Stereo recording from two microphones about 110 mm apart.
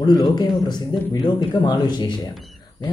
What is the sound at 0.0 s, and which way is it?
Speech, 40° left (ahead or behind).